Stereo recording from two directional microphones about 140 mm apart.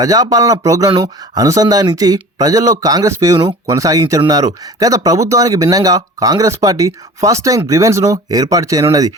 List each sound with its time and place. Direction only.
0.0 s speech: 25° right (ahead or behind)